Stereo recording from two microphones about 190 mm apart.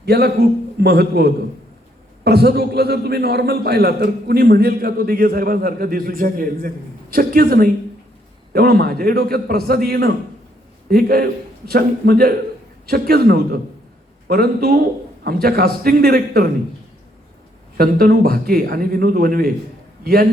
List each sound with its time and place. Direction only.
0.0 s a man's voice: 55° right (ahead or behind)
17.7 s a man's voice: 55° right (ahead or behind)